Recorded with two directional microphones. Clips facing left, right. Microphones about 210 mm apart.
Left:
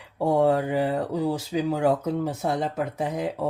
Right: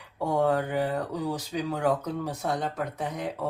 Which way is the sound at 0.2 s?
25° left (ahead or behind).